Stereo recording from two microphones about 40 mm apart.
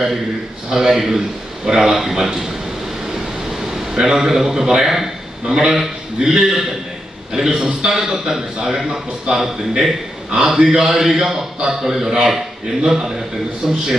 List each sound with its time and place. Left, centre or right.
0.7 s a man's voice: centre
3.9 s a man's voice: centre